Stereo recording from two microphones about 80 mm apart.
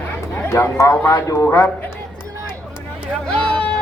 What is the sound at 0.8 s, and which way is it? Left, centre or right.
Speech, left.